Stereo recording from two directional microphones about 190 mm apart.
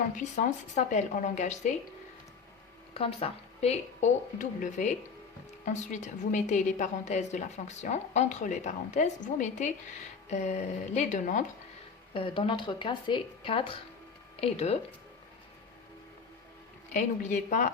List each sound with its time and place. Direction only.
0.3 s a woman's voice: 40° left (ahead or behind)
2.9 s a woman's voice: 30° left (ahead or behind)
12.1 s a woman's voice: 30° left (ahead or behind)
16.9 s a woman's voice: 40° left (ahead or behind)